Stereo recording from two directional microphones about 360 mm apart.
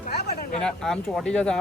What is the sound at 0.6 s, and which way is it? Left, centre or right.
Speech, centre.